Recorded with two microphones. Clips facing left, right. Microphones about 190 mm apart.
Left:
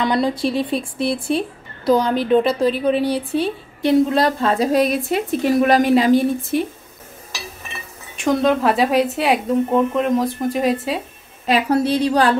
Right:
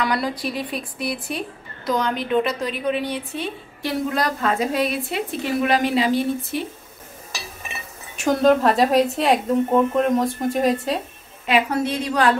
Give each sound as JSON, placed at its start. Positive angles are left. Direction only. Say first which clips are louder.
{"t": 0.0, "sound": "a woman's voice", "louder": "left 5 dB", "side_deg": 25}
{"t": 8.2, "sound": "a woman's voice", "louder": "even", "side_deg": 0}
{"t": 11.4, "sound": "a woman's voice", "louder": "left 3 dB", "side_deg": 35}